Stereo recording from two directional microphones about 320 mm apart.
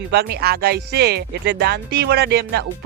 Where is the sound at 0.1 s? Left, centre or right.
Right.